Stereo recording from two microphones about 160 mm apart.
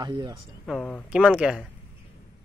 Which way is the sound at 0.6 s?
5° left (ahead or behind).